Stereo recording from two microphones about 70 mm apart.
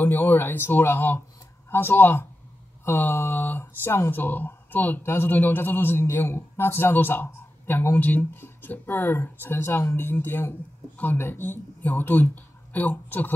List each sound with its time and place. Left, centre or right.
0.0 s a man's voice: left